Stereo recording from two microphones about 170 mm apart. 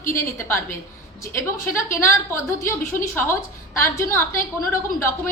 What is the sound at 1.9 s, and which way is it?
A woman's voice, 15° left (ahead or behind).